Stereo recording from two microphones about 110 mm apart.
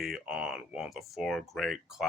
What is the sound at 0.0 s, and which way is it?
Speech, 5° right (ahead or behind).